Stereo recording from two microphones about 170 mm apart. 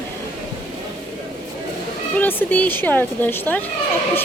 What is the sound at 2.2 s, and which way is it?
Speech, 10° left (ahead or behind).